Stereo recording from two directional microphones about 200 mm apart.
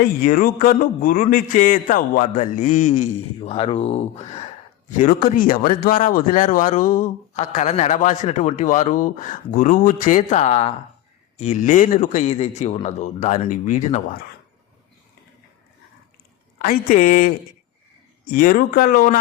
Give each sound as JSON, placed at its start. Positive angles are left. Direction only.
{"t": 0.2, "sound": "speech", "side_deg": 45}
{"t": 16.6, "sound": "speech", "side_deg": 45}